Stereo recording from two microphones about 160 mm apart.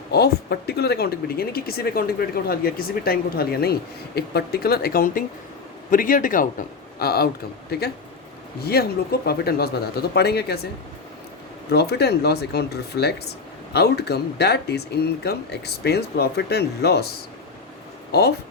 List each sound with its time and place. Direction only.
0.1 s a man's voice: 85° left
8.6 s speech: 80° left
11.7 s speech: 90° left